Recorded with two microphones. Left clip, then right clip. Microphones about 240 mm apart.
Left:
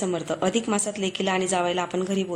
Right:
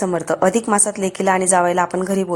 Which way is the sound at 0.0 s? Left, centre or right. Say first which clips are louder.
Right 8 dB; right.